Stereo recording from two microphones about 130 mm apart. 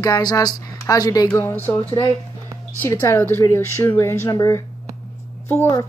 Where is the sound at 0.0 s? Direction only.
30° left (ahead or behind).